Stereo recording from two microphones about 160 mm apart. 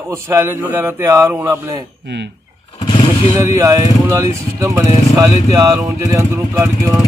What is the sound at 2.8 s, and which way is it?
Vehicle, 30° left (ahead or behind).